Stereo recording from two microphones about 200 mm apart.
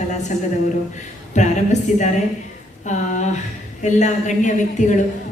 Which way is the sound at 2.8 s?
35° left (ahead or behind).